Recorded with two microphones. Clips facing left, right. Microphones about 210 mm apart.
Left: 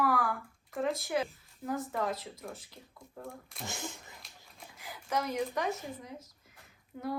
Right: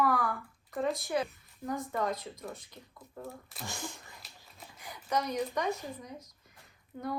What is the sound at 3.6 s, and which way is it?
Speech, 20° left (ahead or behind).